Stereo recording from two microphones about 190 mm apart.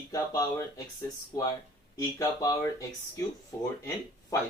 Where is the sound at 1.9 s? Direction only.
20° left (ahead or behind).